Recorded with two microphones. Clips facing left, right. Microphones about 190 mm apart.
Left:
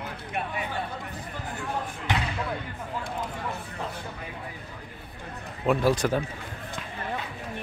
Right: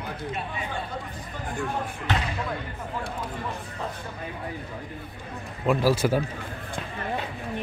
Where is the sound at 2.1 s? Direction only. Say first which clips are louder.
Right 1 dB; 15° left (ahead or behind).